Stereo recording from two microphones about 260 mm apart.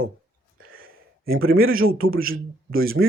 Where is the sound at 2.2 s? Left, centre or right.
Right.